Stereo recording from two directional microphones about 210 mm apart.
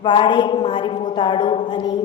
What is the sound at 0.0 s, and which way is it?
A woman's voice, 25° left (ahead or behind).